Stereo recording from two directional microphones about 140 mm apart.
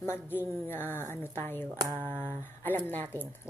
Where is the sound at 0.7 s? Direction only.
15° left (ahead or behind).